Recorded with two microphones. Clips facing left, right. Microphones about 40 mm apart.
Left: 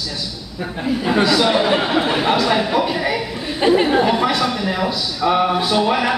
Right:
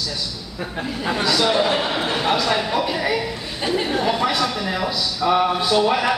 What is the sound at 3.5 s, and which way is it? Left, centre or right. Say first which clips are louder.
Speech: left 9 dB; left.